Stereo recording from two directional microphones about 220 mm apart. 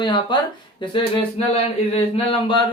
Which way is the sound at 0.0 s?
20° left (ahead or behind).